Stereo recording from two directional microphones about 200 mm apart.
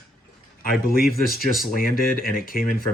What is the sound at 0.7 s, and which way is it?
Speech, 50° left (ahead or behind).